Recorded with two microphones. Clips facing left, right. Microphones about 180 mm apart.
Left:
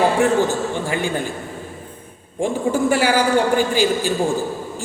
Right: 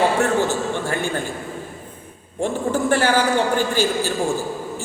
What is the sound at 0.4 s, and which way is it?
Speech, 15° left (ahead or behind).